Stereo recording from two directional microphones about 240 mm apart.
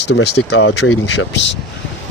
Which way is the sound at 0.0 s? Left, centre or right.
Left.